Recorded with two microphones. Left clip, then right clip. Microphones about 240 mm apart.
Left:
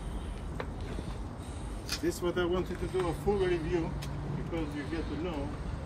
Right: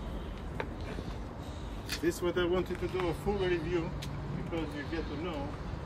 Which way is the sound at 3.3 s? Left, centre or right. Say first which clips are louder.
Left 4 dB; centre.